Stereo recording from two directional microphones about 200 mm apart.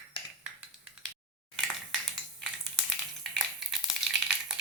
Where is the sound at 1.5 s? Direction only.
Centre (ahead or behind).